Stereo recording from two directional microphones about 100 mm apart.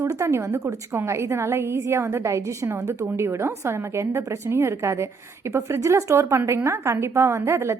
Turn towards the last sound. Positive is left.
turn(degrees=-25)  # may be behind; listen again after turning